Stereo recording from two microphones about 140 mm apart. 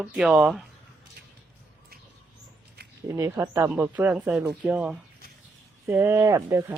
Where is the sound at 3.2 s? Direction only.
25° right (ahead or behind).